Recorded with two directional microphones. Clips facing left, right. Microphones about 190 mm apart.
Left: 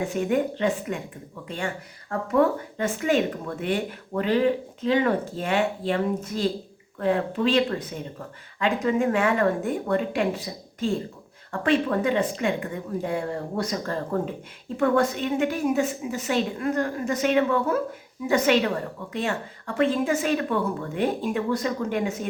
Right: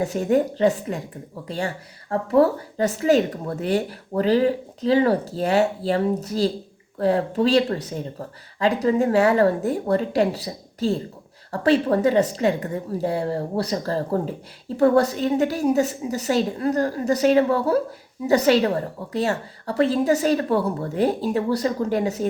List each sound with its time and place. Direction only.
0.0 s a woman's voice: 35° right (ahead or behind)